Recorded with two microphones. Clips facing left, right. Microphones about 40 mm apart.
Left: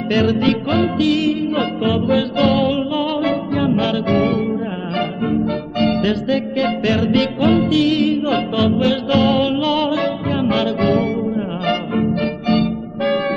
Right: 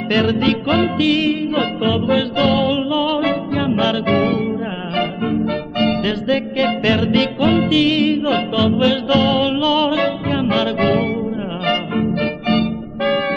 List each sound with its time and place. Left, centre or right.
0.1 s music: centre
6.2 s music: right
11.6 s music: centre